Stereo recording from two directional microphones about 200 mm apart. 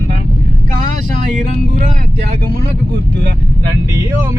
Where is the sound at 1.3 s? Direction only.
40° right (ahead or behind).